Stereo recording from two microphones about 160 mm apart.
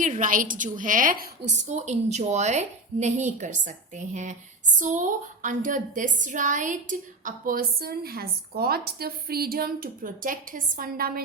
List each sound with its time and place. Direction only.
0.0 s a woman's voice: 55° right (ahead or behind)
1.6 s a woman's voice: 45° right (ahead or behind); by 11.2 s 65° right (ahead or behind)